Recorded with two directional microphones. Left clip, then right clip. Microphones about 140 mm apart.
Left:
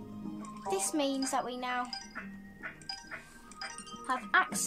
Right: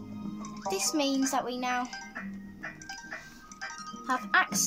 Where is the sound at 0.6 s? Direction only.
Centre (ahead or behind).